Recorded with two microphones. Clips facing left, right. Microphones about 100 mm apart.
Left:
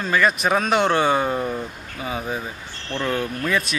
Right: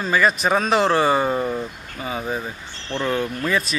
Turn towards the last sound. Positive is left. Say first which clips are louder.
# right 1 dB
turn(degrees=0)  # may be behind; listen again after turning